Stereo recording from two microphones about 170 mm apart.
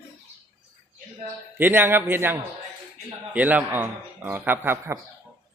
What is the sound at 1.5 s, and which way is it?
A man's voice, 10° right (ahead or behind).